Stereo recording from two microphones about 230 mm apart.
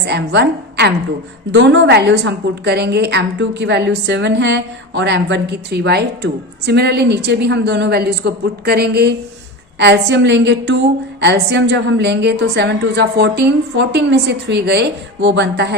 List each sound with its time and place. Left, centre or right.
0.0 s a woman's voice: right